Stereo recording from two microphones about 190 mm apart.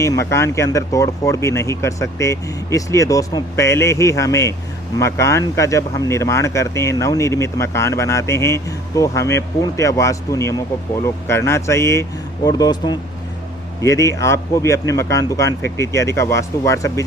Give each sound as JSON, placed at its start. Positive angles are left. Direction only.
{"t": 0.0, "sound": "speech", "side_deg": 15}